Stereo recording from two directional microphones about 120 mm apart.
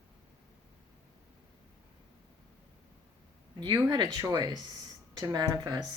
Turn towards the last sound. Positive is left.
turn(degrees=-35)  # may be behind; listen again after turning